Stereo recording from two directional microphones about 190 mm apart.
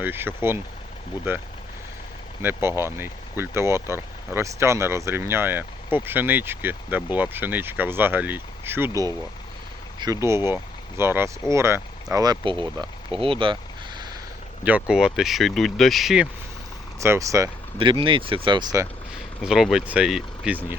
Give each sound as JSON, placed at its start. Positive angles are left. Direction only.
{"t": 0.0, "sound": "speech", "side_deg": -10}
{"t": 14.6, "sound": "speech", "side_deg": -5}
{"t": 17.0, "sound": "speech", "side_deg": -15}
{"t": 17.7, "sound": "speech", "side_deg": -30}
{"t": 19.4, "sound": "speech", "side_deg": -5}